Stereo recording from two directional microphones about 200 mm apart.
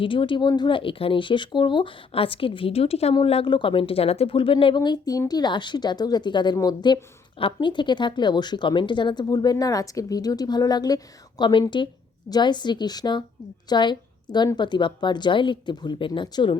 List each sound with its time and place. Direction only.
0.0 s speech: 25° left (ahead or behind)